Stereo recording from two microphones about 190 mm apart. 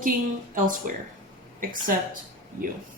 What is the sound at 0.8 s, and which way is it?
Speech, 45° right (ahead or behind).